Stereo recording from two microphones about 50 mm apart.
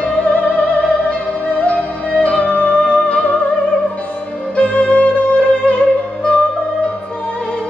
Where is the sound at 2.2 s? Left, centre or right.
Left.